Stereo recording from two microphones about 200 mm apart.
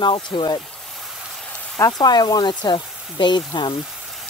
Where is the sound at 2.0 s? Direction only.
20° left (ahead or behind).